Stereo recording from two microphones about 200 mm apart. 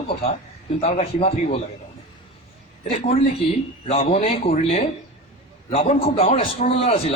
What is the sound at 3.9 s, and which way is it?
A man's voice, 30° left (ahead or behind).